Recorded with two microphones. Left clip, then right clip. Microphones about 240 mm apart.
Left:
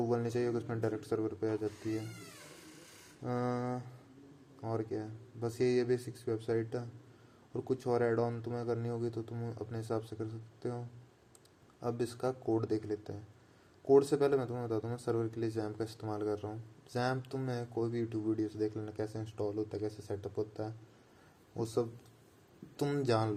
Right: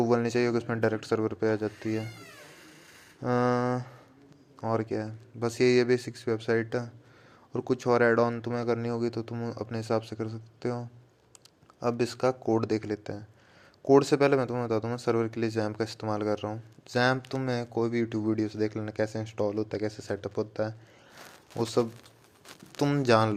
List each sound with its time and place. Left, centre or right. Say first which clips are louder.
0.0 s speech: right 8 dB; right
3.2 s speech: right 10 dB; right